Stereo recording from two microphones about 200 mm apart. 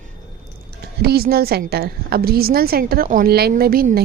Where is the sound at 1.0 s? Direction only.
50° right (ahead or behind).